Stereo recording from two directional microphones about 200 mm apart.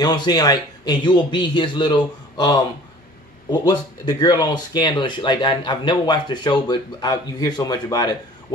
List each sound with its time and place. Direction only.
0.0 s speech: 20° left (ahead or behind)